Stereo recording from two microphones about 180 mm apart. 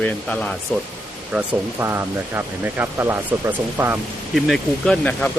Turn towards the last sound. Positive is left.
turn(degrees=5)  # may be behind; listen again after turning